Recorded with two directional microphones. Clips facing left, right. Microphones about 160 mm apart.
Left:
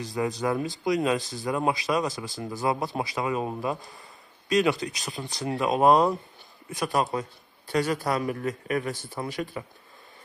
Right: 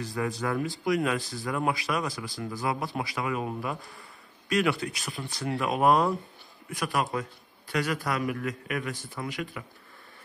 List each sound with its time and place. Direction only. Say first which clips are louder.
0.0 s a man's voice: left 3 dB; 20° left (ahead or behind)